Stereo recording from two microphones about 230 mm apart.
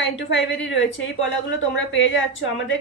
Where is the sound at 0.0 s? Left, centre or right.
Left.